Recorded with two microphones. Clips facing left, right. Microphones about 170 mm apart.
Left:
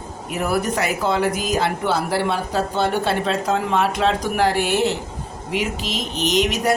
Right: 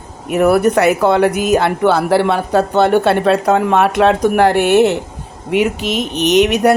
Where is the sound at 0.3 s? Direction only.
65° right (ahead or behind).